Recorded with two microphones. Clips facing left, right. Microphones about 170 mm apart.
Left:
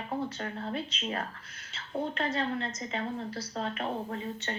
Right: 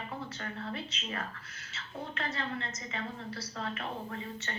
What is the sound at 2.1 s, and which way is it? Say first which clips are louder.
Speech: left 3 dB; 30° left (ahead or behind).